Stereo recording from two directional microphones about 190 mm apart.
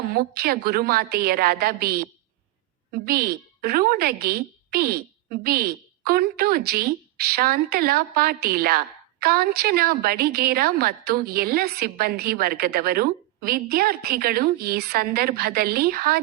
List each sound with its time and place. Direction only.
0.1 s a woman's voice: 50° right (ahead or behind)